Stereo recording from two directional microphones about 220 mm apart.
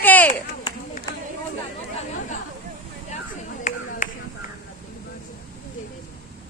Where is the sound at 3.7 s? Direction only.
30° left (ahead or behind).